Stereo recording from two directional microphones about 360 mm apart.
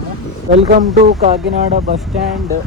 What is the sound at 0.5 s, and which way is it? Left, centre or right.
Speech, right.